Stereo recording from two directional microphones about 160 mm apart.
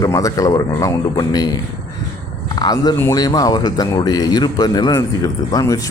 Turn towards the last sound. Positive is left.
turn(degrees=20)  # may be behind; listen again after turning